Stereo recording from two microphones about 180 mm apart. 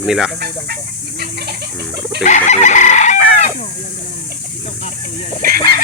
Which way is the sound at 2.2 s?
40° left (ahead or behind).